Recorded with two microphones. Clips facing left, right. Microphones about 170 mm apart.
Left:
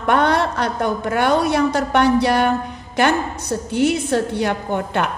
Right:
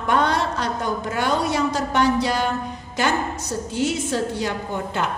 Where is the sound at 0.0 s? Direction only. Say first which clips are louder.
Left 4 dB; 60° left (ahead or behind).